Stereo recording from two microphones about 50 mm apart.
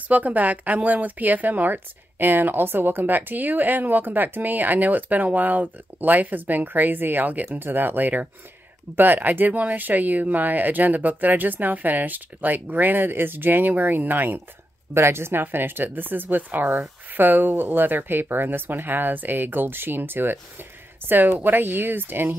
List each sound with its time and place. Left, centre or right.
0.1 s speech: right
15.0 s speech: right